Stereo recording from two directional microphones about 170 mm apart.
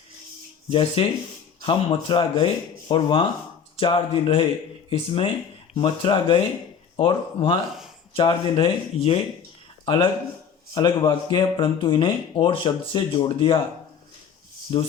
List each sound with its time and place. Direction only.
0.7 s speech: 30° left (ahead or behind)